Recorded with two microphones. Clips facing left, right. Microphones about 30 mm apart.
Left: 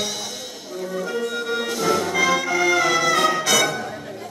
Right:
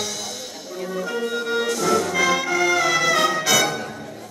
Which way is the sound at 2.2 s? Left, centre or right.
Centre.